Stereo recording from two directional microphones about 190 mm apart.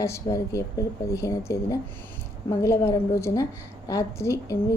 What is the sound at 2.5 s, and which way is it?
A woman's voice, 15° left (ahead or behind).